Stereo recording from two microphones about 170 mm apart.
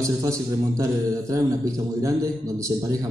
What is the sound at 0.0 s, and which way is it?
A man's voice, 20° right (ahead or behind).